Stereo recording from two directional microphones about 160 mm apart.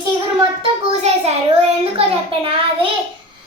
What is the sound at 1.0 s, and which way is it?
A child's voice, 40° right (ahead or behind).